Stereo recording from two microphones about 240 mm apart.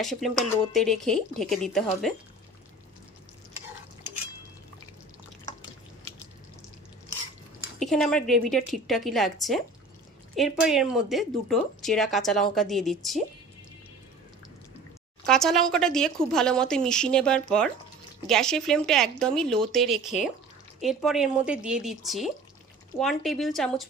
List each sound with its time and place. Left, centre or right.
0.0 s speech: centre
7.8 s speech: centre
15.2 s speech: centre